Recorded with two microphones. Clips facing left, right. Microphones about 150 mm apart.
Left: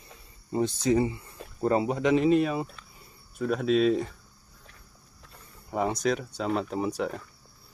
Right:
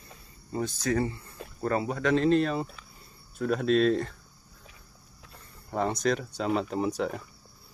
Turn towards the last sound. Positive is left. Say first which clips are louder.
# even
turn(degrees=0)  # may be behind; listen again after turning